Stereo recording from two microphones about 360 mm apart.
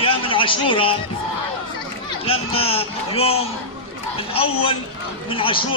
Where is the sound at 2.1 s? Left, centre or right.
Centre.